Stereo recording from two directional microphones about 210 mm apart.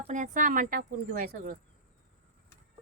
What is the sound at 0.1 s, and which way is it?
Speech, 40° right (ahead or behind).